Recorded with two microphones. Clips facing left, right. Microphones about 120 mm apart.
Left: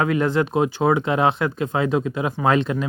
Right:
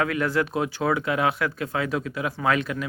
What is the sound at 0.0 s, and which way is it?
Speech, 25° left (ahead or behind).